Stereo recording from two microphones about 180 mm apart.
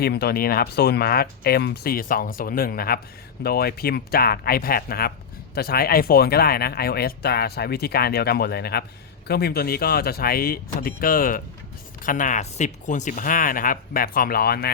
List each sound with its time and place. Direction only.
0.0 s speech: 60° left (ahead or behind)